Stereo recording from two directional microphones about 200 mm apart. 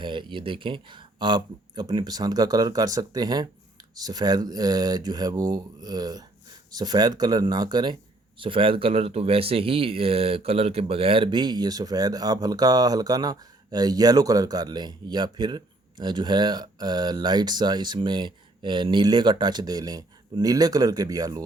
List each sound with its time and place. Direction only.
0.0 s speech: 25° right (ahead or behind)